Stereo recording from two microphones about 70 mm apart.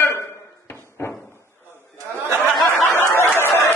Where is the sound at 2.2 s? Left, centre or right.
Right.